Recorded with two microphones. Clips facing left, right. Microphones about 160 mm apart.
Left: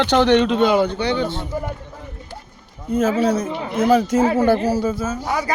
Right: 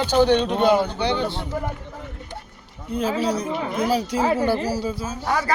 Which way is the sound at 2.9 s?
45° left (ahead or behind).